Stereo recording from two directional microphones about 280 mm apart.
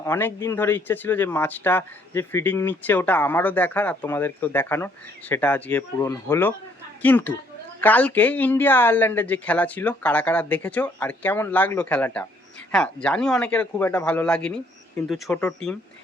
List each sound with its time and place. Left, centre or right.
0.0 s speech: centre